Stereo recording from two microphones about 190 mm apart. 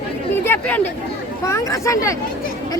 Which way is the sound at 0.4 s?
10° left (ahead or behind).